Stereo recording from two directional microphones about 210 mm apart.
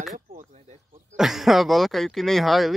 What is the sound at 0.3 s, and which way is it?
Chop, 30° right (ahead or behind).